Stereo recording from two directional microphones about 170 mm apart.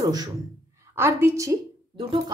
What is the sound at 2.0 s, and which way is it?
Speech, 30° right (ahead or behind).